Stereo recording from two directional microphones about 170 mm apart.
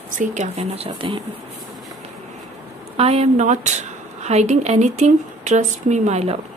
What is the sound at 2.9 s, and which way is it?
Speech, 35° right (ahead or behind).